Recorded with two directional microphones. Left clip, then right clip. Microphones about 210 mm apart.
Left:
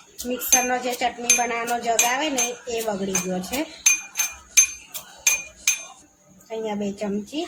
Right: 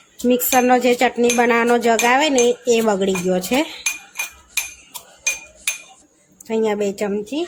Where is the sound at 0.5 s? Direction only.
55° right (ahead or behind).